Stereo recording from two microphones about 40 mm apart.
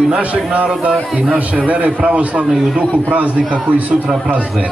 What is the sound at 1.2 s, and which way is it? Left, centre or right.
A man's voice, right.